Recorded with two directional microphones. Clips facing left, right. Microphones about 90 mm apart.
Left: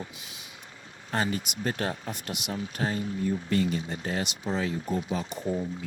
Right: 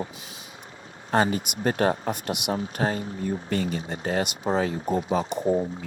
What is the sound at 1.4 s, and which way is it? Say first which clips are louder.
Speech: right 7 dB; 50° right (ahead or behind).